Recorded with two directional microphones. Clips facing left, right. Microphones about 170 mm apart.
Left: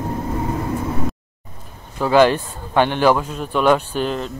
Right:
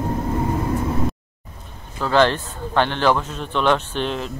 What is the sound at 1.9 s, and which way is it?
A man's voice, 10° left (ahead or behind).